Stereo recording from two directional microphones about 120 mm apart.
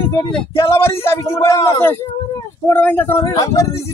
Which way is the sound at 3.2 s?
25° left (ahead or behind).